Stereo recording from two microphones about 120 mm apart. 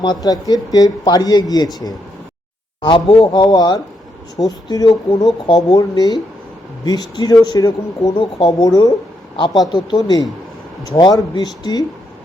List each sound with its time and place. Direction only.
0.0 s speech: 35° left (ahead or behind)